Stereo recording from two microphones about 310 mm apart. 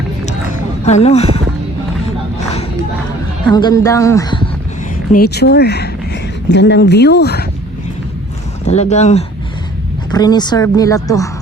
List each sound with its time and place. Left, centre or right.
0.9 s speech: left
3.4 s speech: centre
5.1 s speech: left
8.6 s speech: left